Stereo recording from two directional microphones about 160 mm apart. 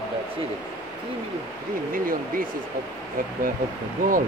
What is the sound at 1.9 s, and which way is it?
Speech, 60° right (ahead or behind).